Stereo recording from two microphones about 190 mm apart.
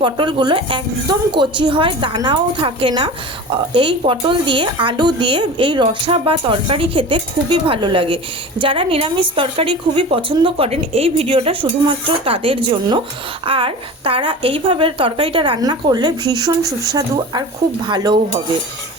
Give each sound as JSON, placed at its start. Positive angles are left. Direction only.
{"t": 0.0, "sound": "a woman's voice", "side_deg": -25}
{"t": 17.8, "sound": "a woman's voice", "side_deg": -25}